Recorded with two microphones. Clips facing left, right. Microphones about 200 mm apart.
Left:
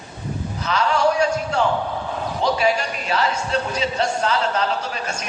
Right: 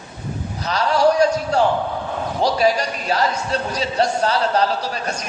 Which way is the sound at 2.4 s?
40° right (ahead or behind).